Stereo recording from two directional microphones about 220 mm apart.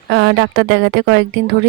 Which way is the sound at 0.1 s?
55° right (ahead or behind).